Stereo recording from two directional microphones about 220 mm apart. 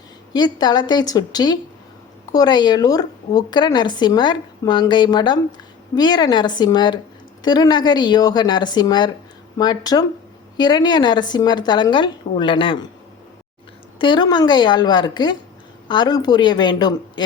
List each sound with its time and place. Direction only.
0.3 s a woman's voice: 20° left (ahead or behind)
14.0 s a woman's voice: 20° left (ahead or behind)